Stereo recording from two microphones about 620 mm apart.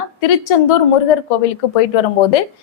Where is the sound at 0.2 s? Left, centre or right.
Left.